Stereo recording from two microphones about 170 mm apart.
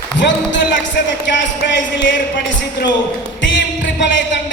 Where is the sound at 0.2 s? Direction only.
90° left.